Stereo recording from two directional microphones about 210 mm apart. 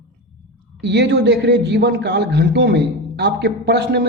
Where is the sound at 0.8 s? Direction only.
55° right (ahead or behind).